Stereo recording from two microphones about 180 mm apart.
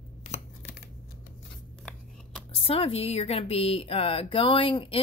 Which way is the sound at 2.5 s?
30° left (ahead or behind).